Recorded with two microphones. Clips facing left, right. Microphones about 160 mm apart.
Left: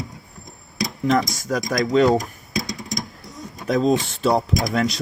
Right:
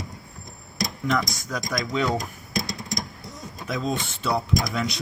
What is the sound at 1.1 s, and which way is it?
Speech, 45° left (ahead or behind).